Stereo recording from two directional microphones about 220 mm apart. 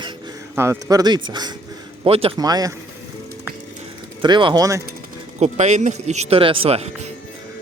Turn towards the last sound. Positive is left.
turn(degrees=-30)  # may be behind; listen again after turning